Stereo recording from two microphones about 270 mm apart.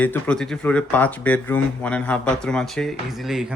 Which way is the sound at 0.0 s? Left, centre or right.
Centre.